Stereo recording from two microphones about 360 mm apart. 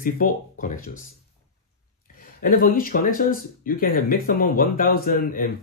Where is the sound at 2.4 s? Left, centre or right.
Left.